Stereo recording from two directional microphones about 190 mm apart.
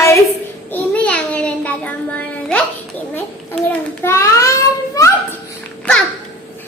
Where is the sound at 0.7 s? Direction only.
5° left (ahead or behind).